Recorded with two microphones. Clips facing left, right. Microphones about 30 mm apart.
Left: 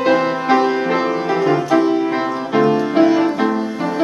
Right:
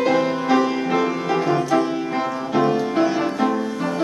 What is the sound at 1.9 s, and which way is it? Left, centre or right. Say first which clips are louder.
Music: left 6 dB; left.